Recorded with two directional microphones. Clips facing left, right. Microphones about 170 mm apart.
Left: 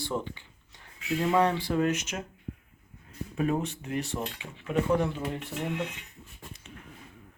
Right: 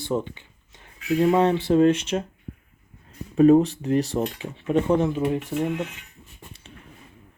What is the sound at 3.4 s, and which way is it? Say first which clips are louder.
Speech: right 14 dB; 35° right (ahead or behind).